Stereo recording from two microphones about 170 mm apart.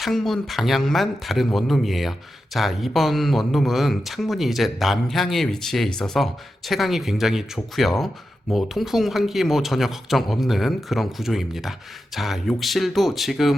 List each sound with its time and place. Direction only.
0.0 s speech: centre (ahead or behind)